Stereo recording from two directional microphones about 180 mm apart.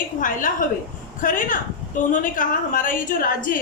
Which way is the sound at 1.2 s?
50° left (ahead or behind).